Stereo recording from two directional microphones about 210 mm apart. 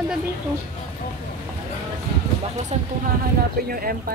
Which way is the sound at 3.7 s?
45° right (ahead or behind).